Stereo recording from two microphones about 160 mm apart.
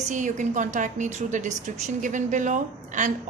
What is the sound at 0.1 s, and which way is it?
A woman's voice, 50° right (ahead or behind).